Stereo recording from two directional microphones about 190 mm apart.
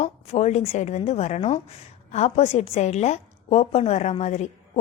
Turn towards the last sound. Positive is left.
turn(degrees=35)  # may be behind; listen again after turning